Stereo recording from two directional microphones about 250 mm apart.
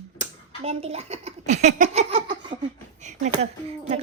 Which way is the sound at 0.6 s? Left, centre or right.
Right.